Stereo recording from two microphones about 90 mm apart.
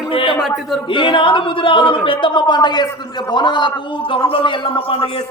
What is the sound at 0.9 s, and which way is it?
A man's voice, 70° left (ahead or behind).